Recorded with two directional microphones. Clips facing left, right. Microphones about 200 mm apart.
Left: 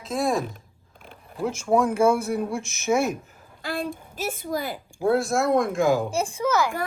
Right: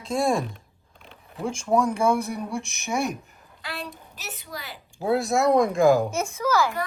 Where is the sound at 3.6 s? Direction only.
50° left (ahead or behind).